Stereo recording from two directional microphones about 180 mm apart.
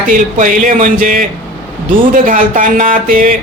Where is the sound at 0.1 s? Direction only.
45° right (ahead or behind).